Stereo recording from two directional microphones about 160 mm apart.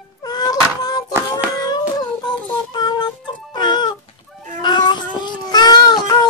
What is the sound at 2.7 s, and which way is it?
Music, 25° left (ahead or behind).